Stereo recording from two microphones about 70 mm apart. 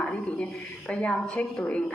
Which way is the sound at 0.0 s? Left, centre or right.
Centre.